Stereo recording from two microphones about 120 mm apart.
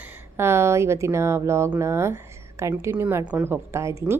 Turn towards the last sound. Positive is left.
turn(degrees=-25)  # may be behind; listen again after turning